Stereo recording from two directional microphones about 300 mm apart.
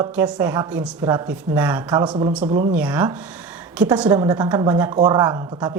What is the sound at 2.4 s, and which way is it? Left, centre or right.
Speech, right.